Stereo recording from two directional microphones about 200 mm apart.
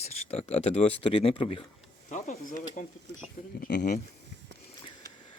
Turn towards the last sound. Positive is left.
turn(degrees=40)  # may be behind; listen again after turning